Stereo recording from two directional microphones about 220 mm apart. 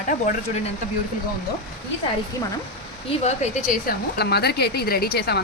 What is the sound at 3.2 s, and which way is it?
Speech, 30° left (ahead or behind).